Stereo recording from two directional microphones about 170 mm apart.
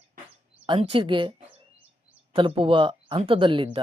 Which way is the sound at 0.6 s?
35° right (ahead or behind).